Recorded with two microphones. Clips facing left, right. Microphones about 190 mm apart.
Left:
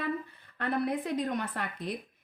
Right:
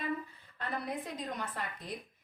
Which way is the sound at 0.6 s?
65° left (ahead or behind).